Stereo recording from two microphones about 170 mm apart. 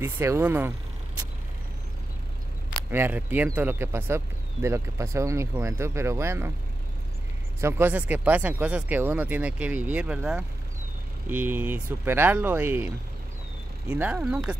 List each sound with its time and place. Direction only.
0.0 s speech: 15° right (ahead or behind)
2.9 s speech: 10° right (ahead or behind)
7.6 s speech: 10° right (ahead or behind)